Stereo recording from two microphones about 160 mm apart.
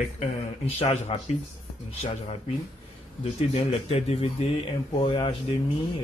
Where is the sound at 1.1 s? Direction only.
40° left (ahead or behind).